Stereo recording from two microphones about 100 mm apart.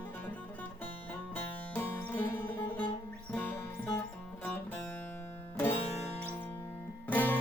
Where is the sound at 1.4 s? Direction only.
20° left (ahead or behind).